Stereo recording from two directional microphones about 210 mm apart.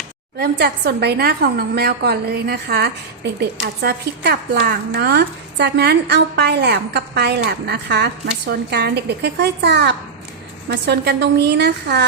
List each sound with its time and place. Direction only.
0.3 s a woman's voice: 50° right (ahead or behind)